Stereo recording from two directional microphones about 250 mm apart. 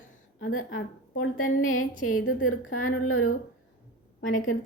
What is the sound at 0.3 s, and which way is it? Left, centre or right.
A woman's voice, left.